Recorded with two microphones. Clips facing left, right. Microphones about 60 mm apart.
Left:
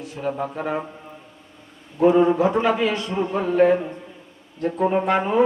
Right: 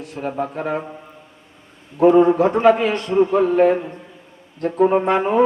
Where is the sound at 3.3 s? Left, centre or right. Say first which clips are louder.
Even; right.